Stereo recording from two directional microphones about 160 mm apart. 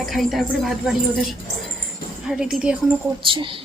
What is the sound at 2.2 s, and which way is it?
Speech, 5° right (ahead or behind).